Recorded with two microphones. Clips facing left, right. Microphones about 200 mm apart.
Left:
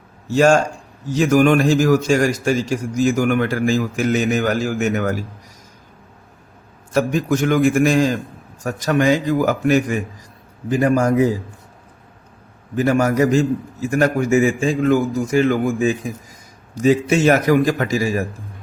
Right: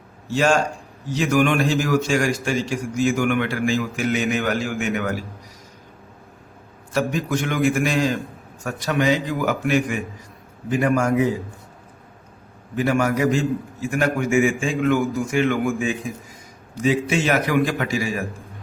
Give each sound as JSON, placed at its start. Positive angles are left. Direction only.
{"t": 0.3, "sound": "a man's voice", "side_deg": 45}
{"t": 6.9, "sound": "a man's voice", "side_deg": 45}
{"t": 12.7, "sound": "a man's voice", "side_deg": 40}